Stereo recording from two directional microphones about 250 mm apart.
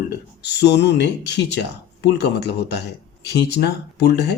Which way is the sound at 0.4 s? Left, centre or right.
Left.